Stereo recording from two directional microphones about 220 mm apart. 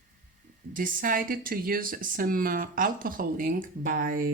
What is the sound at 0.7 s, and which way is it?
Speech, 40° right (ahead or behind).